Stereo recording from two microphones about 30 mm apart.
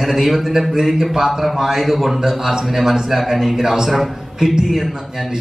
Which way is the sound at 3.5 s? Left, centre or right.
Centre.